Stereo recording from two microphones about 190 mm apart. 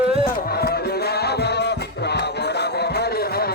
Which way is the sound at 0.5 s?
55° left (ahead or behind).